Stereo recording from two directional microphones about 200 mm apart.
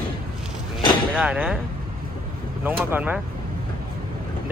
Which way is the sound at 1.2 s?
5° right (ahead or behind).